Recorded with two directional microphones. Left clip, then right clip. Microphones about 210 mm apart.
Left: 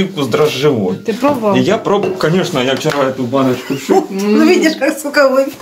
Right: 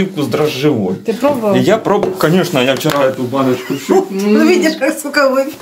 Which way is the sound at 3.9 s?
Centre (ahead or behind).